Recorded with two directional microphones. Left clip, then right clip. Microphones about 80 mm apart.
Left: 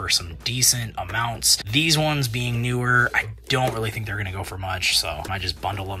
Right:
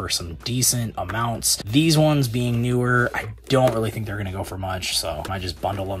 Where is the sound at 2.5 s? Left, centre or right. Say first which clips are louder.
Right 3 dB; right.